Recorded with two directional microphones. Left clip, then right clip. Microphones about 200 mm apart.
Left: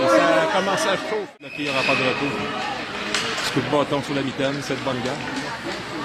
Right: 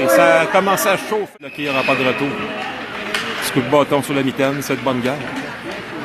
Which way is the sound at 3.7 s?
30° right (ahead or behind).